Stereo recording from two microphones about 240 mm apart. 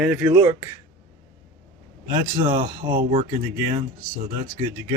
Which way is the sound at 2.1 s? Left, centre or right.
Centre.